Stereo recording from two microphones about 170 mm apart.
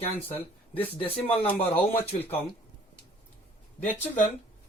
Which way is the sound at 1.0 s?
35° left (ahead or behind).